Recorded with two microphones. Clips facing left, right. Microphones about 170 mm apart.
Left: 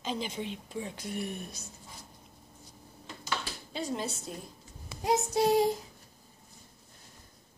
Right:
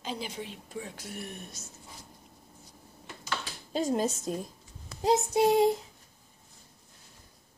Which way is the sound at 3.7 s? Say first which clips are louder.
Right 7 dB; 45° right (ahead or behind).